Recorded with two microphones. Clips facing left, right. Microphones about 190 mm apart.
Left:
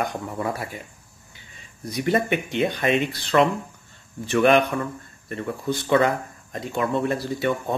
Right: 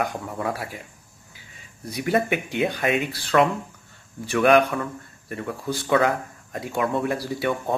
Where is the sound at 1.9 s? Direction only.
5° right (ahead or behind).